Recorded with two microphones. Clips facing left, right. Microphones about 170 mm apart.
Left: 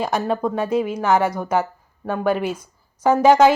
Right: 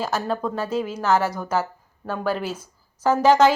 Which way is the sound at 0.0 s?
10° left (ahead or behind).